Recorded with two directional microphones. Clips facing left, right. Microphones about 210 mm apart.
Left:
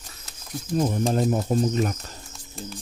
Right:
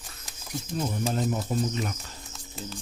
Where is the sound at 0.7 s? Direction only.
45° left (ahead or behind).